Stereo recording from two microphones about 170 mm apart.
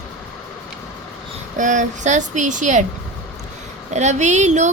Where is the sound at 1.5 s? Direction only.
45° right (ahead or behind).